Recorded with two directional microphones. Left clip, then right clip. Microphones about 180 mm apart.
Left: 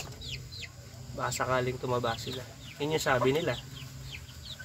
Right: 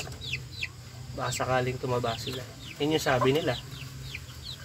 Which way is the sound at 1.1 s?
15° left (ahead or behind).